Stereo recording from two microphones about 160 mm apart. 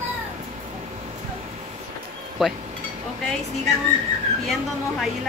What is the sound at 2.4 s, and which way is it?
Speech, centre (ahead or behind).